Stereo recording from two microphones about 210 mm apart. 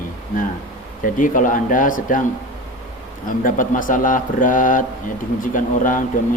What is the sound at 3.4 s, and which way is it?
Speech, 40° left (ahead or behind).